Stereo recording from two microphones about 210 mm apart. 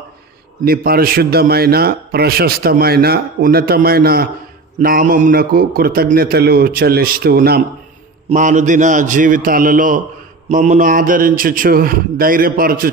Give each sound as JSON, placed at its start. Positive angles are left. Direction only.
{"t": 0.7, "sound": "a man's voice", "side_deg": -45}
{"t": 8.3, "sound": "a man's voice", "side_deg": -35}